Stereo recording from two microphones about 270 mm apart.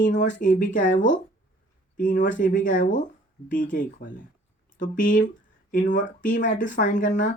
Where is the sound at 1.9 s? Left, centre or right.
Left.